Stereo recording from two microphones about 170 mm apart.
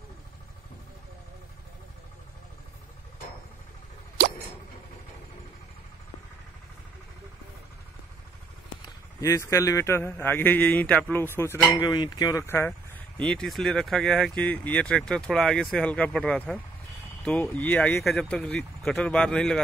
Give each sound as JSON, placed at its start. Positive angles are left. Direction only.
{"t": 8.8, "sound": "a man's voice", "side_deg": 20}
{"t": 11.7, "sound": "a man's voice", "side_deg": 25}